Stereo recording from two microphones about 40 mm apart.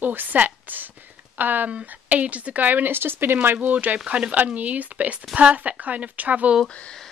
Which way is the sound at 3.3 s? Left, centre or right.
Right.